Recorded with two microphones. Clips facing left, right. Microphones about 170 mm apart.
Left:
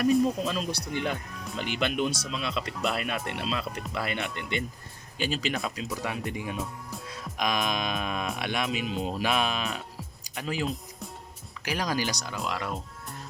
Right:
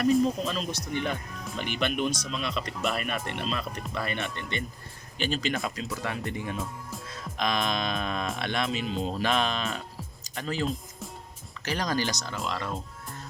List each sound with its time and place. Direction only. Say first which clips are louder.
0.4 s speech: left 1 dB; 10° left (ahead or behind)
5.9 s speech: even; 10° left (ahead or behind)